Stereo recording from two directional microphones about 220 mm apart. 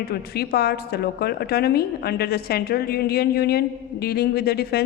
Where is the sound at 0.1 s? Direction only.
45° left (ahead or behind).